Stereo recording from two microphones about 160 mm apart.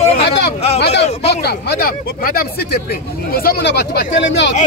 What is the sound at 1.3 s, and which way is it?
Speech, 85° left.